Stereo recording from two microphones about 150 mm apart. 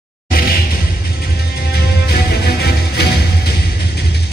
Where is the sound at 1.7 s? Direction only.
90° left.